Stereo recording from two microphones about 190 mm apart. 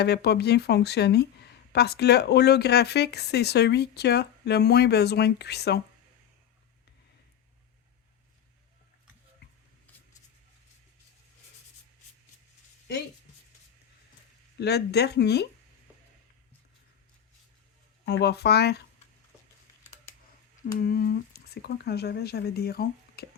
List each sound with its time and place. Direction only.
0.0 s speech: 60° left (ahead or behind)
14.6 s speech: 60° left (ahead or behind)
18.0 s speech: 60° left (ahead or behind)
20.7 s speech: 50° left (ahead or behind)